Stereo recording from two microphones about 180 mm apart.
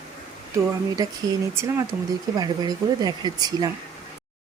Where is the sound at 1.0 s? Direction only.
20° right (ahead or behind).